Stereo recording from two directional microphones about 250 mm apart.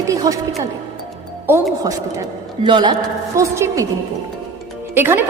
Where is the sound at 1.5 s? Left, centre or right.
Centre.